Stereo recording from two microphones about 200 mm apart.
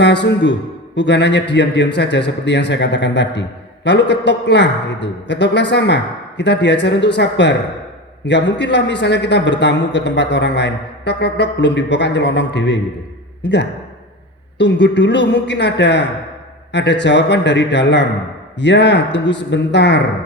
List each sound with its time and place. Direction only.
0.0 s a man's voice: 60° left (ahead or behind)